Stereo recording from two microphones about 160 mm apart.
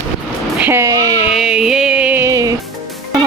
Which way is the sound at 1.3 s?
5° right (ahead or behind).